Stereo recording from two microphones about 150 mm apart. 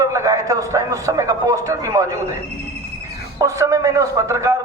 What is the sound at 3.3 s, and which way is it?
A man's voice, 20° right (ahead or behind).